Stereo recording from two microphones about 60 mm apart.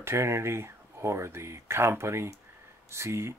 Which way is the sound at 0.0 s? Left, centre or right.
Right.